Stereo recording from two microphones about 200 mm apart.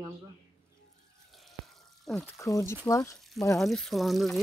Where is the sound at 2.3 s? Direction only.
15° left (ahead or behind).